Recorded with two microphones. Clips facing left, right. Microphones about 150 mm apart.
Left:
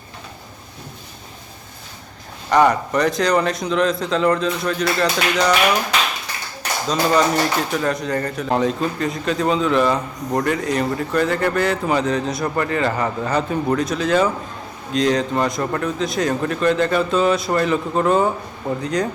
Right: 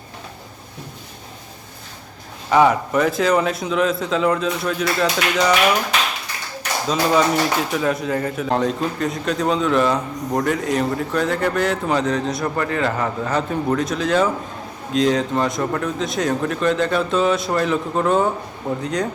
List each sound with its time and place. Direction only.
2.5 s speech: 5° right (ahead or behind)
6.8 s speech: 5° right (ahead or behind)